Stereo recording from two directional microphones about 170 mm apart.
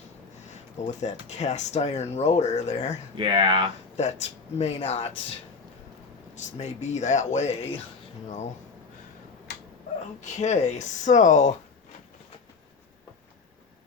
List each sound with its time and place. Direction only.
0.8 s speech: 40° left (ahead or behind)
3.2 s speech: 30° right (ahead or behind)
3.9 s speech: 40° left (ahead or behind)
6.3 s speech: 40° left (ahead or behind)
10.2 s speech: 45° left (ahead or behind)